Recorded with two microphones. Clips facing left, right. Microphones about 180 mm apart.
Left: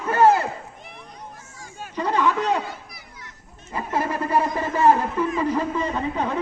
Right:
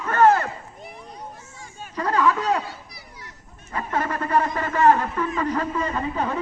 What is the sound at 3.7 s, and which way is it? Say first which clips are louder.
A man's voice: left 1 dB; 5° left (ahead or behind).